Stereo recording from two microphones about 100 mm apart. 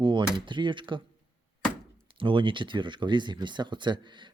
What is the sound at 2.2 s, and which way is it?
Speech, 60° right (ahead or behind).